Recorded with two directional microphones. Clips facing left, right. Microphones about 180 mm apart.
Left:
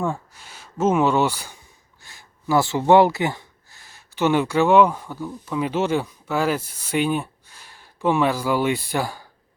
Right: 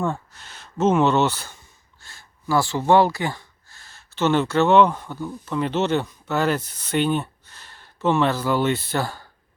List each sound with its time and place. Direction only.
0.0 s speech: 10° left (ahead or behind)